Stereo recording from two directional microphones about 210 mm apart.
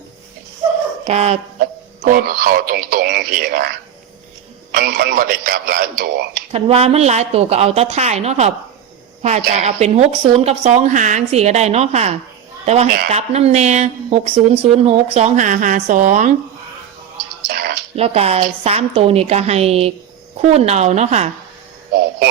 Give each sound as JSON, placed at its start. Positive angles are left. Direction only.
{"t": 1.0, "sound": "speech", "side_deg": -30}
{"t": 6.5, "sound": "a woman's voice", "side_deg": -30}
{"t": 17.5, "sound": "a sound", "side_deg": -45}
{"t": 17.9, "sound": "a woman's voice", "side_deg": -30}